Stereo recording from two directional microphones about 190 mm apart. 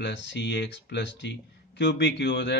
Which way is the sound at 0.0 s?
70° left (ahead or behind).